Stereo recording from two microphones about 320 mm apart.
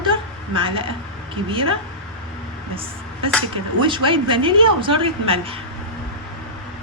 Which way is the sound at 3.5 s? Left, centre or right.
Centre.